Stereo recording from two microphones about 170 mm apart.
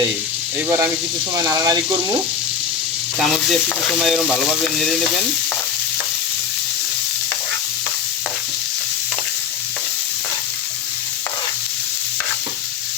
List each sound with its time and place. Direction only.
1.5 s speech: 20° right (ahead or behind)
3.2 s speech: centre (ahead or behind)